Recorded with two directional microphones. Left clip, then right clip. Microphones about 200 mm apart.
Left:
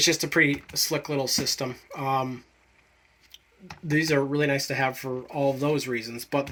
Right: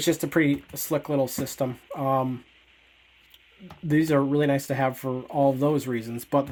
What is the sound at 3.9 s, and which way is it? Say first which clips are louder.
Speech: right 2 dB; 65° right (ahead or behind).